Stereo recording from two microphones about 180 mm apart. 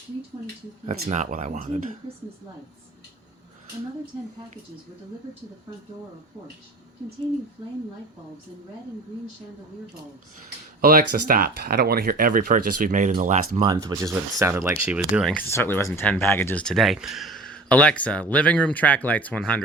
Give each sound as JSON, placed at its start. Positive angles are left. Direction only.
{"t": 0.9, "sound": "speech", "side_deg": -40}
{"t": 10.8, "sound": "speech", "side_deg": -55}
{"t": 13.6, "sound": "speech", "side_deg": -20}
{"t": 15.4, "sound": "speech", "side_deg": 15}